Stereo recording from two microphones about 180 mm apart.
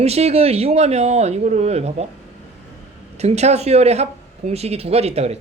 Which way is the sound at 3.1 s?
35° right (ahead or behind).